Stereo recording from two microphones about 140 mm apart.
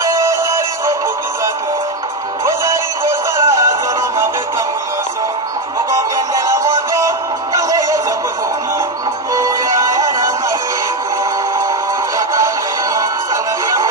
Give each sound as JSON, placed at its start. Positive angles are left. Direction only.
{"t": 0.0, "sound": "music", "side_deg": -20}
{"t": 3.3, "sound": "music", "side_deg": -20}
{"t": 5.9, "sound": "music", "side_deg": -25}
{"t": 9.3, "sound": "music", "side_deg": -25}
{"t": 12.9, "sound": "music", "side_deg": -25}